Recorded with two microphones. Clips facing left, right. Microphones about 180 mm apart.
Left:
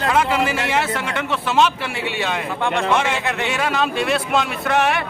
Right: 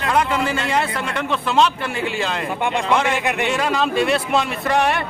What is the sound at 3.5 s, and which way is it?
Speech, centre (ahead or behind).